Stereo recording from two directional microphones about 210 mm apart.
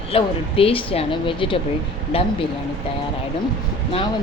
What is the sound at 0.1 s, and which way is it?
Speech, 25° left (ahead or behind).